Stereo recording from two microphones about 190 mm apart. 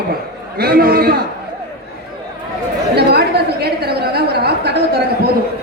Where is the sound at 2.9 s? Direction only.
60° right (ahead or behind).